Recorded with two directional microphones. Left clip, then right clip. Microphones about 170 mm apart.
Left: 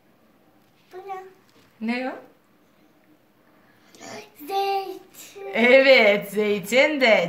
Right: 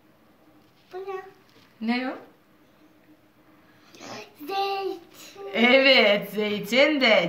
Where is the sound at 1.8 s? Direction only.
45° left (ahead or behind).